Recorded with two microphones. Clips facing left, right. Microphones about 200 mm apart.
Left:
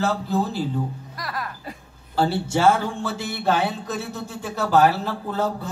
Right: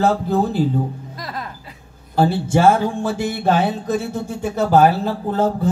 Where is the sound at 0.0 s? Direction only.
55° right (ahead or behind).